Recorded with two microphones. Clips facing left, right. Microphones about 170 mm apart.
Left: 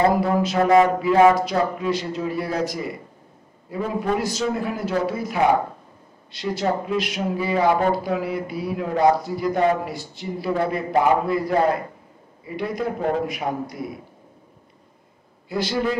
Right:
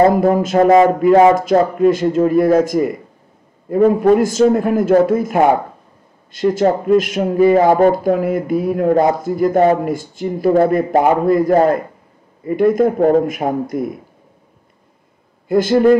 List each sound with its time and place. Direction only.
0.1 s speech: 45° right (ahead or behind)
15.4 s speech: 50° right (ahead or behind)